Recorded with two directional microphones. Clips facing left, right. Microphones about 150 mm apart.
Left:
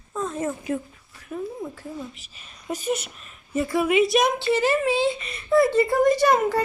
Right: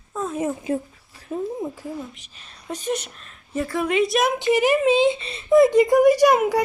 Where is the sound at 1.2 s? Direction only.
30° right (ahead or behind).